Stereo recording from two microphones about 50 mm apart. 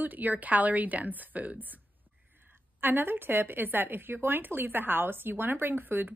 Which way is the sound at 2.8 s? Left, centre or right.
Right.